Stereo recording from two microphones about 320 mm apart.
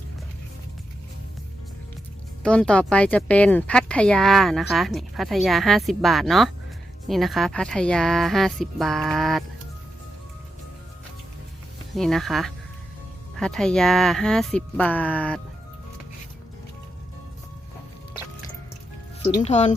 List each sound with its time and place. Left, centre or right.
2.4 s speech: centre
11.9 s speech: centre
19.2 s speech: left